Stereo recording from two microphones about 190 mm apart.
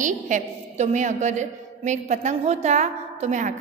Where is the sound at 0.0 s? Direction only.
40° right (ahead or behind).